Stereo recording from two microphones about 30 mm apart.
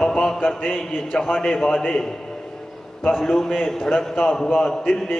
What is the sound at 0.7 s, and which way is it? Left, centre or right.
A man's voice, left.